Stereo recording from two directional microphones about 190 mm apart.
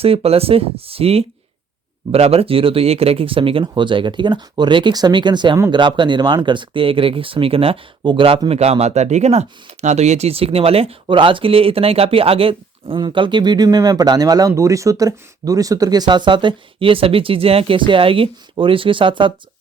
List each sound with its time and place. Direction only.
0.0 s speech: 30° right (ahead or behind)